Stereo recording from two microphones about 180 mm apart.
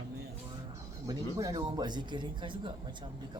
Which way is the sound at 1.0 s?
20° right (ahead or behind).